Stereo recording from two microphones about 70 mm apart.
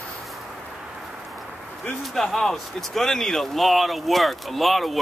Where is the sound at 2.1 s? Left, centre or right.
Centre.